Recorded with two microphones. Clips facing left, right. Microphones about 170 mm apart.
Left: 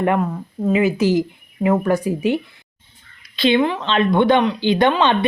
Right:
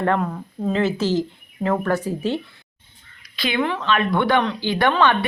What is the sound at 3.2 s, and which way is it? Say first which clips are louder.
Speech: left 6 dB; 25° left (ahead or behind).